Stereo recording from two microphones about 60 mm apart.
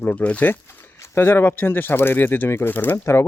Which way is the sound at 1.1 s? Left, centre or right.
Left.